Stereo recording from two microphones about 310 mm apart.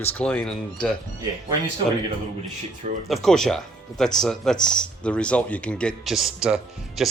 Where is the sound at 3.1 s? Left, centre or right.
Centre.